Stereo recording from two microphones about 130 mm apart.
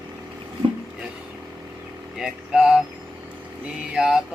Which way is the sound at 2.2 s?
5° right (ahead or behind).